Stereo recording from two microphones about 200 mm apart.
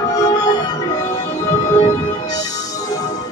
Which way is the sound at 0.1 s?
20° left (ahead or behind).